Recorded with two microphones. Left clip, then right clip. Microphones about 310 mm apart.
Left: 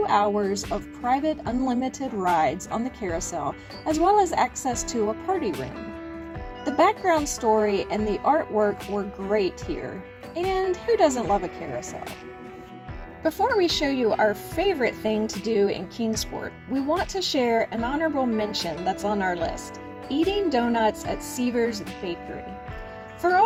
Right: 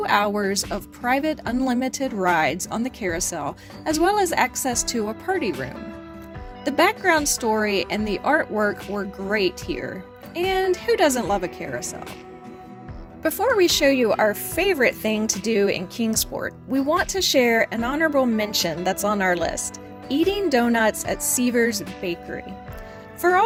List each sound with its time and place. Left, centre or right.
0.0 s speech: right
5.5 s speech: centre
6.7 s speech: right
13.2 s speech: right